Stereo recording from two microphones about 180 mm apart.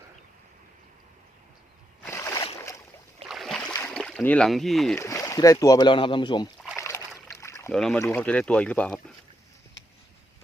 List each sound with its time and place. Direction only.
2.0 s a sound: 15° left (ahead or behind)
3.2 s boat: centre (ahead or behind)
3.8 s speech: 5° left (ahead or behind)
4.9 s speech: 20° left (ahead or behind)
6.6 s a sound: 15° left (ahead or behind)
7.7 s speech: 5° left (ahead or behind)